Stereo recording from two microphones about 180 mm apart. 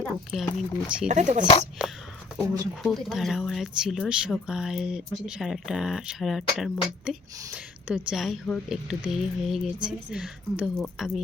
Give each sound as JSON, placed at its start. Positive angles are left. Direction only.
{"t": 0.0, "sound": "speech", "side_deg": 5}
{"t": 1.0, "sound": "speech", "side_deg": -40}
{"t": 1.8, "sound": "speech", "side_deg": -5}